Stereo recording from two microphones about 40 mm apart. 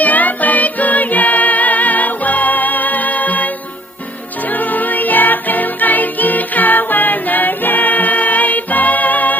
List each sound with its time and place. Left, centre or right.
0.0 s music: left
4.6 s music: left